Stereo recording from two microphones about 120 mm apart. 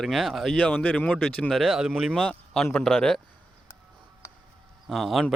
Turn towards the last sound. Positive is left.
turn(degrees=0)  # may be behind; listen again after turning